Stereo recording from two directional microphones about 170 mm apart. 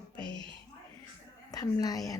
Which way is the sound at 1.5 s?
20° left (ahead or behind).